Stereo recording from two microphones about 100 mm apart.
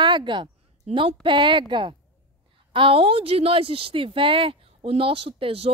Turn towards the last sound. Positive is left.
turn(degrees=-70)  # may be behind; listen again after turning